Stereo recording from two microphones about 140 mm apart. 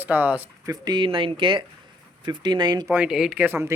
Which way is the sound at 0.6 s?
30° right (ahead or behind).